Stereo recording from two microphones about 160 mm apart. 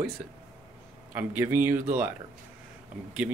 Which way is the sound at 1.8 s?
55° right (ahead or behind).